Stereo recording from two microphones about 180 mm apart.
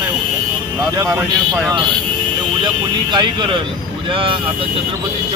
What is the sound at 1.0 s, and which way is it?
Speech, 15° right (ahead or behind).